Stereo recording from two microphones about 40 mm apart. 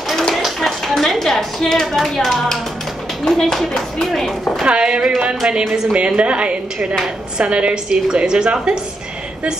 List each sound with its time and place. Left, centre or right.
0.3 s a sound: centre
3.3 s a woman's voice: centre
4.6 s a woman's voice: right